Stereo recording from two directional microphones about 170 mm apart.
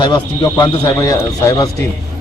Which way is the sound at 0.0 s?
25° left (ahead or behind).